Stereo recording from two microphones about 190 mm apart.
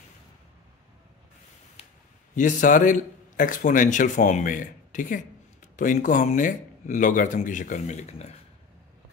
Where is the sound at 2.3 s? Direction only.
45° left (ahead or behind).